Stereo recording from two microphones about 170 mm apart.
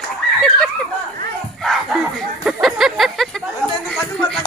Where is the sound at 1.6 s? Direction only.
Centre (ahead or behind).